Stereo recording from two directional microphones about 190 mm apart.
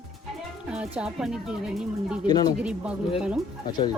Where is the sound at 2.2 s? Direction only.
20° left (ahead or behind).